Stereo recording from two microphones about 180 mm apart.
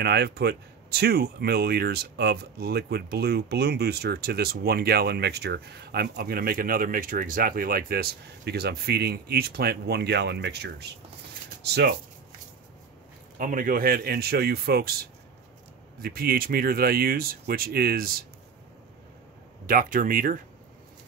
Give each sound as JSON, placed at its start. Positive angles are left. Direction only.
{"t": 0.0, "sound": "speech", "side_deg": -65}
{"t": 13.4, "sound": "speech", "side_deg": -50}
{"t": 16.0, "sound": "speech", "side_deg": -55}
{"t": 19.6, "sound": "speech", "side_deg": -50}